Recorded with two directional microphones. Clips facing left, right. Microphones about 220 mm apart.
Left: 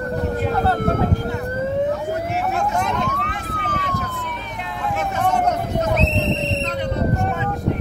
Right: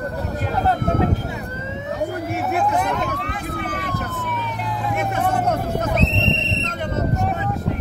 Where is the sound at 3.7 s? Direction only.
55° right (ahead or behind).